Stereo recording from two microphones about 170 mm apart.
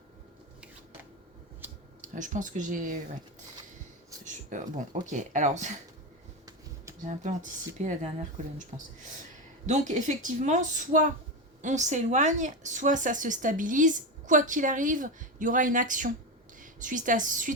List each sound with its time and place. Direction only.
2.0 s speech: 50° right (ahead or behind)
4.3 s speech: 50° right (ahead or behind)
7.0 s a woman's voice: 45° right (ahead or behind)